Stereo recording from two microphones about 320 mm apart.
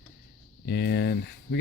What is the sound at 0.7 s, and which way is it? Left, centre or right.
Speech, left.